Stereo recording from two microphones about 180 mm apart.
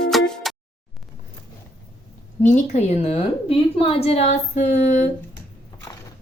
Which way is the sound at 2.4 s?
45° left (ahead or behind).